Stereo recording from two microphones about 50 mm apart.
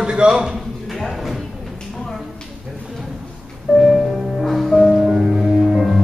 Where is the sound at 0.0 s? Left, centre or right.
Centre.